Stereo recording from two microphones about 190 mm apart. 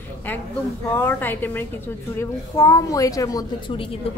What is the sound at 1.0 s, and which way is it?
A woman's voice, 10° left (ahead or behind).